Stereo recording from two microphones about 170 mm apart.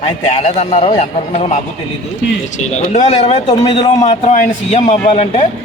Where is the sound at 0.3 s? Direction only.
40° left (ahead or behind).